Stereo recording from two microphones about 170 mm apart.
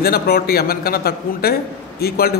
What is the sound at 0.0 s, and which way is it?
A man's voice, 65° left (ahead or behind).